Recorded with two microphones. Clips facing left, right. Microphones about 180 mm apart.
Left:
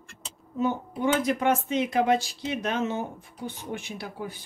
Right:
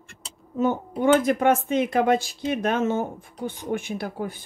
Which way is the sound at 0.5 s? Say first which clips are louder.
Right 4 dB; 50° right (ahead or behind).